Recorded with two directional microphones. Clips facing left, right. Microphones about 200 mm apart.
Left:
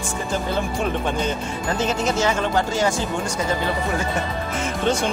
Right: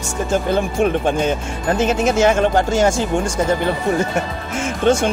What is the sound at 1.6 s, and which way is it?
Music, 55° right (ahead or behind).